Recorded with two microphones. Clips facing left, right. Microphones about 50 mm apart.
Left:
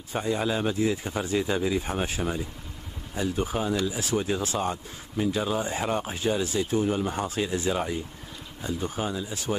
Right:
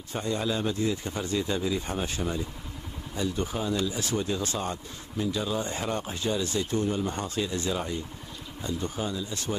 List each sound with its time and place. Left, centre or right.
0.1 s speech: centre
4.1 s speech: centre